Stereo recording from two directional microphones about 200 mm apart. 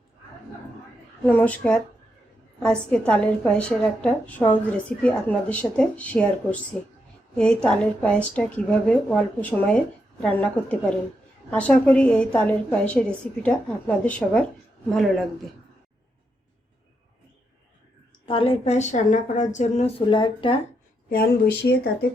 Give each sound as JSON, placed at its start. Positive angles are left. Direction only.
{"t": 1.2, "sound": "a woman's voice", "side_deg": 5}
{"t": 18.3, "sound": "speech", "side_deg": 25}
{"t": 21.1, "sound": "speech", "side_deg": 50}